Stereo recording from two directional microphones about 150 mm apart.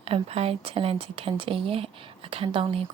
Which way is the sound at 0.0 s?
40° right (ahead or behind).